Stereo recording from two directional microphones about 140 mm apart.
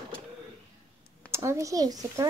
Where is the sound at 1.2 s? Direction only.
20° right (ahead or behind).